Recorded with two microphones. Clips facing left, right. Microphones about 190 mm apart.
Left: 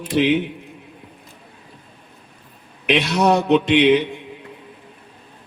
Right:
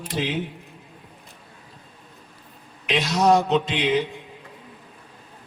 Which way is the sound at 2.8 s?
65° left (ahead or behind).